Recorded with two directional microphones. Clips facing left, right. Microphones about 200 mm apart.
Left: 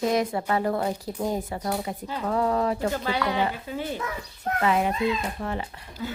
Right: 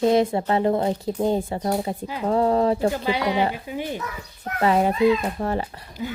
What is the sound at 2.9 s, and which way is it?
Speech, 15° right (ahead or behind).